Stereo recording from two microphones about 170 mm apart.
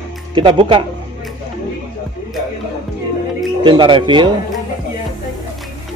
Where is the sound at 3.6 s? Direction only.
30° right (ahead or behind).